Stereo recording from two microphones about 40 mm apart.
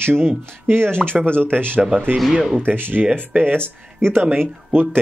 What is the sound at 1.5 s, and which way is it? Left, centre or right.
Speech, right.